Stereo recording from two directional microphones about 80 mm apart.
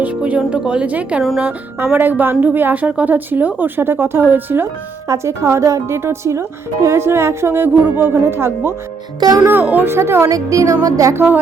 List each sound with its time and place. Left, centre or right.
0.0 s a woman's voice: centre
5.0 s a woman's voice: right
9.4 s a woman's voice: centre
10.2 s speech: right
11.1 s a woman's voice: right